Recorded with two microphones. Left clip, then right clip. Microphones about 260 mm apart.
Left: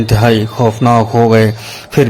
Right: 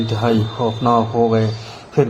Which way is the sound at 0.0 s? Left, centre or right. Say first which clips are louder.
Left 7 dB; left.